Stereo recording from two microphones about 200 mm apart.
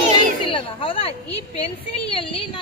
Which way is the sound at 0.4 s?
25° left (ahead or behind).